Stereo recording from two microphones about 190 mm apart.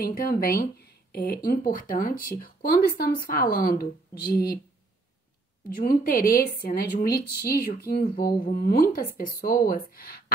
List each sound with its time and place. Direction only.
0.0 s a woman's voice: 50° left (ahead or behind)
5.8 s a woman's voice: 50° left (ahead or behind)